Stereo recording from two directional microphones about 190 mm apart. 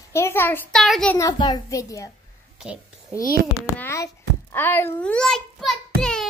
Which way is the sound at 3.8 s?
15° left (ahead or behind).